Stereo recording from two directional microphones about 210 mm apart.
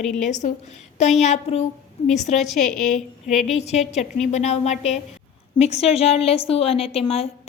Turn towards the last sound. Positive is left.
turn(degrees=30)  # may be behind; listen again after turning